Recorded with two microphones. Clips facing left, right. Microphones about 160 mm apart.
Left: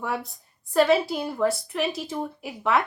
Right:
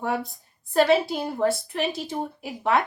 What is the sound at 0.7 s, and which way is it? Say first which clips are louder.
A woman's voice: even; 30° right (ahead or behind).